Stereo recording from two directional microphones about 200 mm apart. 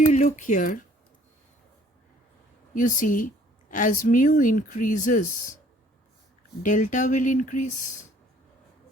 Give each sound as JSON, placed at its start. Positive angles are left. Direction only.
{"t": 0.1, "sound": "speech", "side_deg": 35}
{"t": 2.7, "sound": "a woman's voice", "side_deg": 40}
{"t": 6.6, "sound": "a woman's voice", "side_deg": 40}